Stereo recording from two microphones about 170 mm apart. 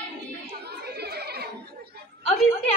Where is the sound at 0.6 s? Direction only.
70° right (ahead or behind).